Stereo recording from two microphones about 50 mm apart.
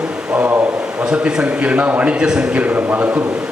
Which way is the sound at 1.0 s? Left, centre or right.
Centre.